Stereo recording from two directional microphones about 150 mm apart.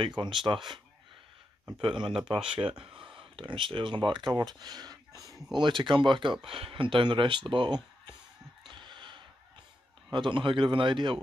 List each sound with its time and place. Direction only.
0.2 s speech: 35° right (ahead or behind)
1.8 s speech: 35° right (ahead or behind)
2.3 s speech: 5° right (ahead or behind)
2.8 s speech: 35° right (ahead or behind)
8.6 s a sound: 35° right (ahead or behind)
10.1 s speech: 35° right (ahead or behind)